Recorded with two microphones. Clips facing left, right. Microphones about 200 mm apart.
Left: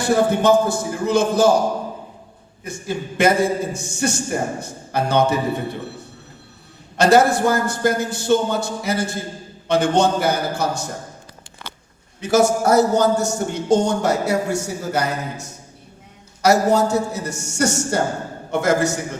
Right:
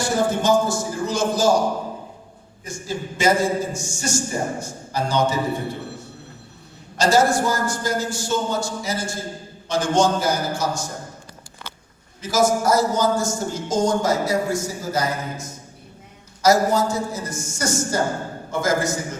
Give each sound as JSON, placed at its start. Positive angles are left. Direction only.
{"t": 0.0, "sound": "a man's voice", "side_deg": 60}
{"t": 2.6, "sound": "a man's voice", "side_deg": 60}
{"t": 6.9, "sound": "a man's voice", "side_deg": 60}
{"t": 12.2, "sound": "speech", "side_deg": 65}
{"t": 16.4, "sound": "speech", "side_deg": 65}